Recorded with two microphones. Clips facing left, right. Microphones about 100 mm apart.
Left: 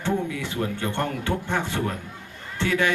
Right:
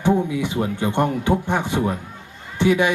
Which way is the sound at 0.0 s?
15° right (ahead or behind).